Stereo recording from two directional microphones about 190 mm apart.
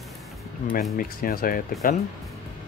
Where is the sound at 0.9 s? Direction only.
50° left (ahead or behind).